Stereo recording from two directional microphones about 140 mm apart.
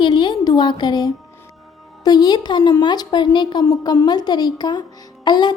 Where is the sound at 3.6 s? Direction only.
20° left (ahead or behind).